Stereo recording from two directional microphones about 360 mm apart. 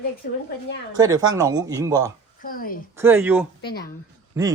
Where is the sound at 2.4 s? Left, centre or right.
Left.